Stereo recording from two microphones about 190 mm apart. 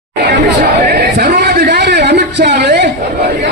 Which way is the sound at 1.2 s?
60° right (ahead or behind).